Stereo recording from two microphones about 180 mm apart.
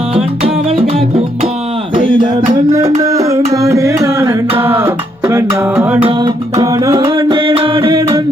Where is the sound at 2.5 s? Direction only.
20° right (ahead or behind).